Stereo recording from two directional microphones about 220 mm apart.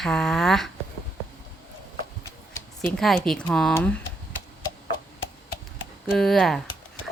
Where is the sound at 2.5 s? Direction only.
5° left (ahead or behind).